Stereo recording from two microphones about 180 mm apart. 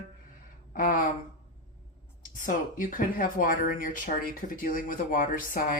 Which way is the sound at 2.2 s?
50° left (ahead or behind).